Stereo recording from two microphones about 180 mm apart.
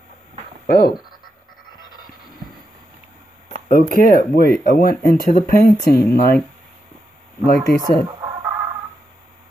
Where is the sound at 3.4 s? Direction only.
50° left (ahead or behind).